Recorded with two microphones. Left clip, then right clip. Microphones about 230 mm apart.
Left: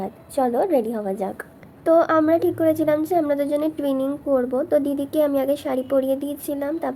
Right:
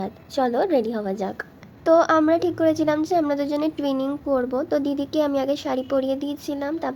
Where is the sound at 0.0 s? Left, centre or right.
Centre.